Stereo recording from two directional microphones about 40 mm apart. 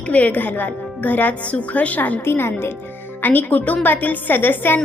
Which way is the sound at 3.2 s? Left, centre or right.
Left.